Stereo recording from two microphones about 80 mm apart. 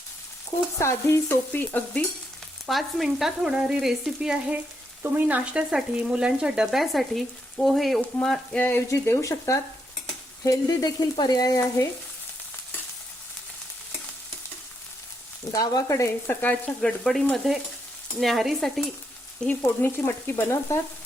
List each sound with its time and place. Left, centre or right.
0.8 s speech: left
1.3 s stir: left
2.6 s frying: centre; by 5.6 s right
5.7 s frying: centre
8.5 s stir: left
8.9 s speech: left
10.4 s frying: left
15.5 s frying: left
16.2 s stir: left
16.8 s frying: centre
19.5 s stir: left